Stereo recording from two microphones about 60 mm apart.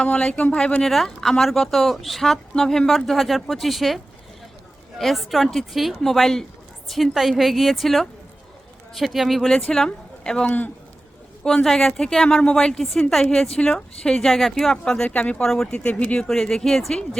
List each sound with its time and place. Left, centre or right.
0.0 s speech: centre
0.9 s speech: centre
9.5 s a woman's voice: centre
16.2 s a woman's voice: centre